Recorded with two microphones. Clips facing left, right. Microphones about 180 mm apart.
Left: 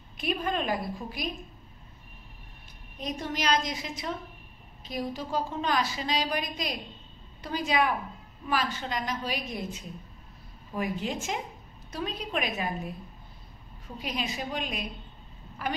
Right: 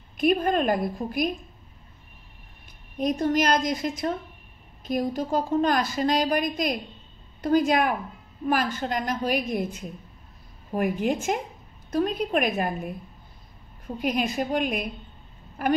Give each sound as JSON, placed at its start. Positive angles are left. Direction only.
{"t": 0.2, "sound": "a woman's voice", "side_deg": -50}
{"t": 3.0, "sound": "a woman's voice", "side_deg": -50}